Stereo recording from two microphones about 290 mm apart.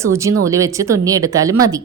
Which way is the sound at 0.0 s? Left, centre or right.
Centre.